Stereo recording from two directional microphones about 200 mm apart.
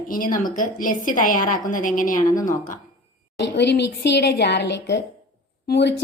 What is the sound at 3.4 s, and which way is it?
A woman's voice, 55° left (ahead or behind).